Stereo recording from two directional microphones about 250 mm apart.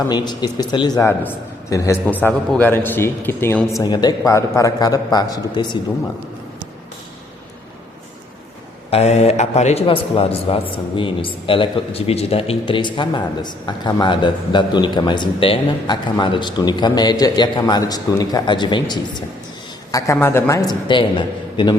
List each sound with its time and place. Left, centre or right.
0.1 s a man's voice: centre
8.9 s a man's voice: left